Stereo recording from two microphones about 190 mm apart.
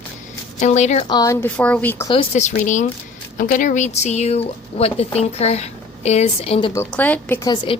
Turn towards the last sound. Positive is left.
turn(degrees=10)  # may be behind; listen again after turning